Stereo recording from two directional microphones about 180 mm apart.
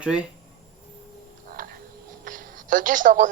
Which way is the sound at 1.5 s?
50° right (ahead or behind).